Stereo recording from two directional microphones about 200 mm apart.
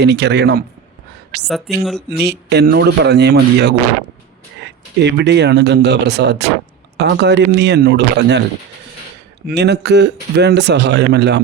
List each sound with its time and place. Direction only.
0.0 s a man's voice: 60° right (ahead or behind)
1.5 s speech: centre (ahead or behind)
2.2 s a man's voice: 55° right (ahead or behind)
9.5 s a man's voice: 55° right (ahead or behind)